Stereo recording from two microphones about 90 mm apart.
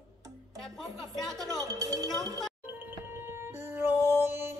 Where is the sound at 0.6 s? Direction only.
Centre (ahead or behind).